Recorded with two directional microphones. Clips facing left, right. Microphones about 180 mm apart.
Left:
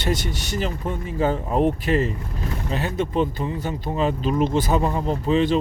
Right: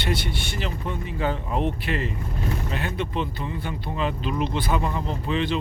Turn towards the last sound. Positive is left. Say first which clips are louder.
# left 6 dB
turn(degrees=40)  # may be behind; listen again after turning